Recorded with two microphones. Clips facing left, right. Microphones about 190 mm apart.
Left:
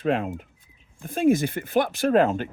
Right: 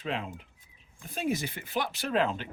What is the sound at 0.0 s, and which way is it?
Speech, 50° left (ahead or behind).